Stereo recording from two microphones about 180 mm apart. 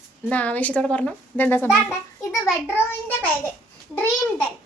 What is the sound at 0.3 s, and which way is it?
A woman's voice, 10° left (ahead or behind).